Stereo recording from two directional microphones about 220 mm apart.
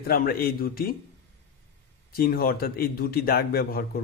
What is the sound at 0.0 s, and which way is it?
Speech, 45° left (ahead or behind).